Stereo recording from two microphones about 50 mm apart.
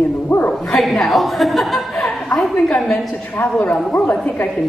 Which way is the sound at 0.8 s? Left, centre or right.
Centre.